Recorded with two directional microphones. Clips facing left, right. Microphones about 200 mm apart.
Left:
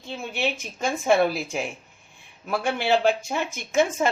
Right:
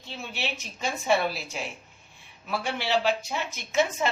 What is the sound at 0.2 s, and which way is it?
Speech, 50° left (ahead or behind).